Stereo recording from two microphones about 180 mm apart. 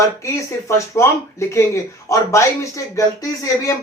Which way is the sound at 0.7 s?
15° left (ahead or behind).